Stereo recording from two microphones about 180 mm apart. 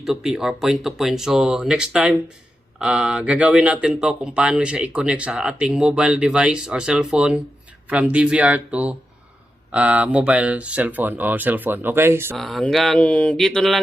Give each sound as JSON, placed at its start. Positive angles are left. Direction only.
{"t": 0.0, "sound": "speech", "side_deg": 0}
{"t": 12.4, "sound": "speech", "side_deg": 0}